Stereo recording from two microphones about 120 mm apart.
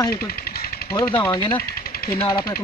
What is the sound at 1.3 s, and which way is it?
Speech, 45° left (ahead or behind).